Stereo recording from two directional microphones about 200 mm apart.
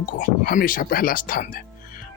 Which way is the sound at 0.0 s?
45° left (ahead or behind).